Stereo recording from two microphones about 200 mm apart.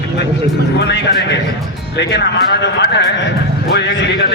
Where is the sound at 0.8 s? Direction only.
60° left (ahead or behind).